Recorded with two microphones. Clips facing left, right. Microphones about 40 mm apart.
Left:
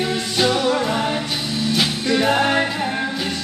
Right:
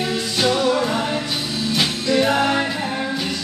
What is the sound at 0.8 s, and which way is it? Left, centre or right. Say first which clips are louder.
Music: even; centre.